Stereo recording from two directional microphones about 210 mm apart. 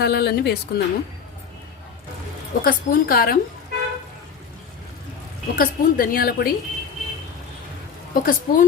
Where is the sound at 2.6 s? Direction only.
45° left (ahead or behind).